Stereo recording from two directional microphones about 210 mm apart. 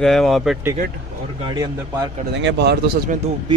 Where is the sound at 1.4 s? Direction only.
15° right (ahead or behind).